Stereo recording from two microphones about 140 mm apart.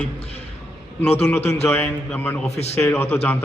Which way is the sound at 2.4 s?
50° left (ahead or behind).